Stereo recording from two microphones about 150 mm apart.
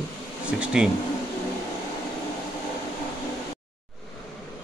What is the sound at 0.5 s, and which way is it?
Insect, 5° right (ahead or behind).